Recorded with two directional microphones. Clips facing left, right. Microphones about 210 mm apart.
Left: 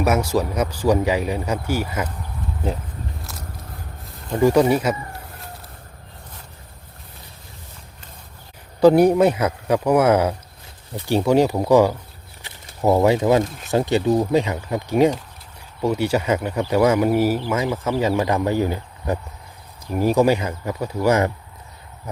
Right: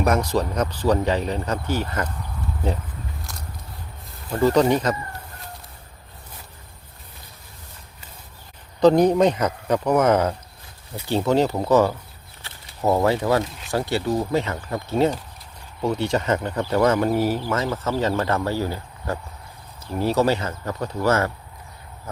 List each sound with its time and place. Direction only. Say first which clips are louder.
0.0 s speech: left 1 dB; 5° left (ahead or behind)
4.3 s speech: left 2 dB; 10° left (ahead or behind)
8.8 s speech: left 2 dB; 10° left (ahead or behind)